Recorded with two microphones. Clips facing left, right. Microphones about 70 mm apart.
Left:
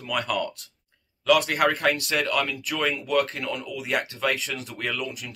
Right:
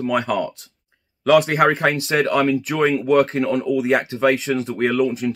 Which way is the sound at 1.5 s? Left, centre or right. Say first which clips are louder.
Right 5 dB; right.